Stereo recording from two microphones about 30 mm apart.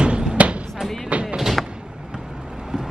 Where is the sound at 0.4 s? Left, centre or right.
Right.